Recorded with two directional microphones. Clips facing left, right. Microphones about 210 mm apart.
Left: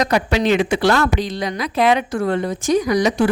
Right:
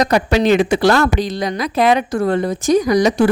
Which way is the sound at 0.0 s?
40° right (ahead or behind).